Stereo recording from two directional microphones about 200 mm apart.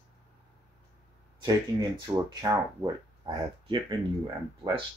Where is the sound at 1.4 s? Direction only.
20° right (ahead or behind).